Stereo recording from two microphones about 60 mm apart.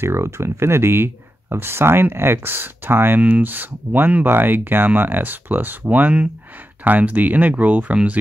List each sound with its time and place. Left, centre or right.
0.0 s speech: right
3.2 s speech: right